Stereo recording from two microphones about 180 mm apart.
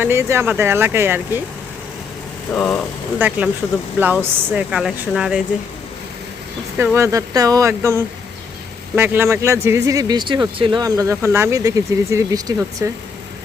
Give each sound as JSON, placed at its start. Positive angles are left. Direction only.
{"t": 0.0, "sound": "speech", "side_deg": -15}
{"t": 2.5, "sound": "speech", "side_deg": 5}
{"t": 3.2, "sound": "speech", "side_deg": -10}
{"t": 6.7, "sound": "speech", "side_deg": -15}